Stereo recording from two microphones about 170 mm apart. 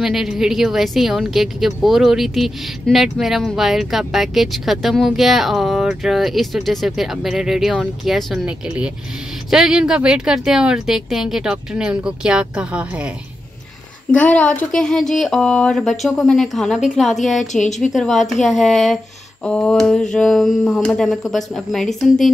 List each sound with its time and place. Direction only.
0.0 s a woman's voice: centre (ahead or behind)
14.1 s a woman's voice: 10° left (ahead or behind)